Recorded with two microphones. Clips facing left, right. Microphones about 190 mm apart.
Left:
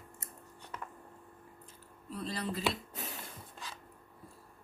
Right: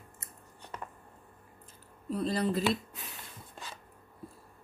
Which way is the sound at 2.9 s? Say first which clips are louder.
Left 4 dB; 40° left (ahead or behind).